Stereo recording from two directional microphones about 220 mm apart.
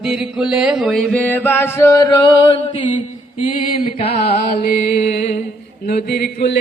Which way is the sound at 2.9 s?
30° left (ahead or behind).